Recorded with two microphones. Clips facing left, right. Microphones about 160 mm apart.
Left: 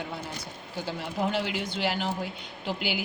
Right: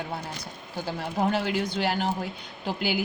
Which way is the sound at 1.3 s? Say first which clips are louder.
Right 3 dB; 45° right (ahead or behind).